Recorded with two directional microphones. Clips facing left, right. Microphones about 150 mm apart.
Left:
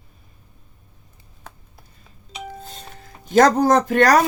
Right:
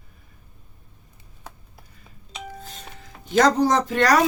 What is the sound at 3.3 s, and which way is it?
Speech, 50° left (ahead or behind).